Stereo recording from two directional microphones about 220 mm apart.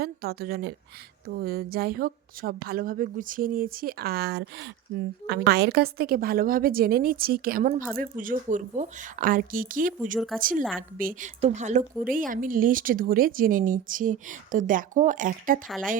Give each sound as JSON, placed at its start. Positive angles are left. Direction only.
{"t": 0.0, "sound": "a woman's voice", "side_deg": -45}
{"t": 10.6, "sound": "a woman's voice", "side_deg": 5}
{"t": 10.9, "sound": "speech", "side_deg": -40}
{"t": 15.6, "sound": "a woman's voice", "side_deg": 0}